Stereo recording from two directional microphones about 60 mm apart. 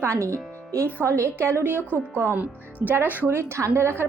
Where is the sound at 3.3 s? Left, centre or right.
Right.